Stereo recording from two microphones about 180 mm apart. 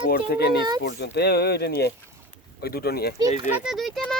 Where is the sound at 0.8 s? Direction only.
70° left (ahead or behind).